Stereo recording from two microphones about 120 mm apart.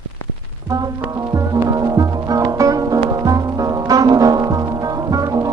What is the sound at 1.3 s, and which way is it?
Music, 30° right (ahead or behind).